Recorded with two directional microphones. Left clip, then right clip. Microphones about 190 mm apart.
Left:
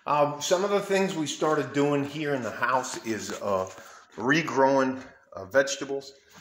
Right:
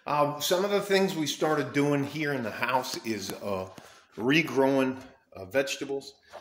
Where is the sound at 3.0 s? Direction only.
35° right (ahead or behind).